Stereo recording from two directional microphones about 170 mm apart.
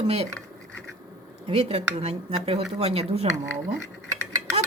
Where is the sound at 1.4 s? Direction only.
35° right (ahead or behind).